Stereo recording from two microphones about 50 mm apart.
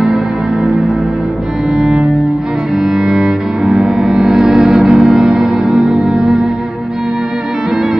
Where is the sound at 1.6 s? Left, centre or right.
Centre.